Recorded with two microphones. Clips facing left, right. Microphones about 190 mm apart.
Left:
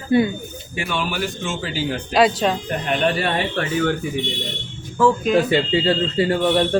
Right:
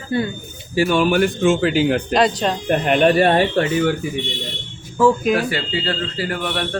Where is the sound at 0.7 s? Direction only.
40° right (ahead or behind); by 2.0 s 60° right (ahead or behind).